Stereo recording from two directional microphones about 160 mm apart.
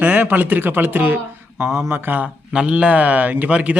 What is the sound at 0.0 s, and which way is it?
Speech, 10° right (ahead or behind).